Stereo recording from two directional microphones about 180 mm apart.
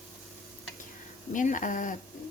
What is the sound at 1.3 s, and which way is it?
Speech, 45° left (ahead or behind).